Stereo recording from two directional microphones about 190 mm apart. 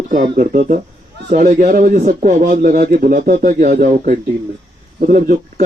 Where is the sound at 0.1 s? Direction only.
40° right (ahead or behind).